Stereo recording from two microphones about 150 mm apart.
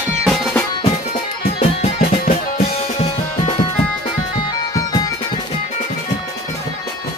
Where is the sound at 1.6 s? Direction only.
40° left (ahead or behind).